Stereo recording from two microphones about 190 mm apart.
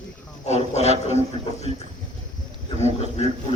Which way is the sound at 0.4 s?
35° left (ahead or behind).